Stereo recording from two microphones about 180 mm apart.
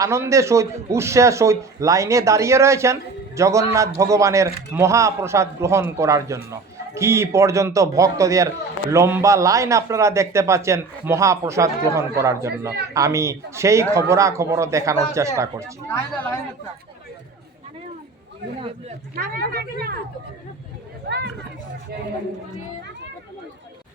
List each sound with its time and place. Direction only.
0.0 s a man's voice: 15° right (ahead or behind)
15.6 s speech: 10° left (ahead or behind)
19.1 s speech: 55° right (ahead or behind)
21.1 s speech: 70° right (ahead or behind)